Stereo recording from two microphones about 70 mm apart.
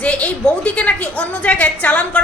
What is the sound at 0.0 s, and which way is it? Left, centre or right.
A woman's voice, centre.